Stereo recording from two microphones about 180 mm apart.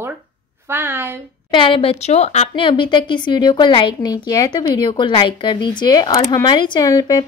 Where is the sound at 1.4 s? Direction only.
25° left (ahead or behind).